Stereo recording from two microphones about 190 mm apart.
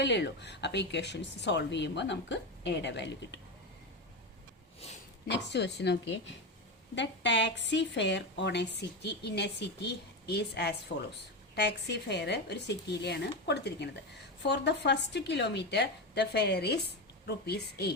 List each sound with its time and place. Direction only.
0.0 s a woman's voice: 65° left (ahead or behind)
5.3 s a woman's voice: 65° left (ahead or behind)